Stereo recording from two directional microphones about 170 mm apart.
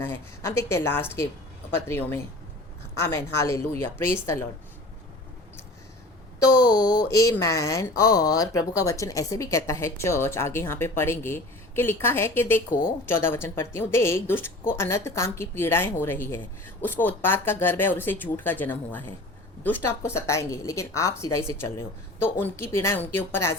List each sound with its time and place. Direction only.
0.0 s speech: 15° left (ahead or behind)
6.7 s speech: 25° left (ahead or behind)